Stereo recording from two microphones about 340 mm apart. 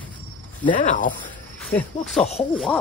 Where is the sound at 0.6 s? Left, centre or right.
Left.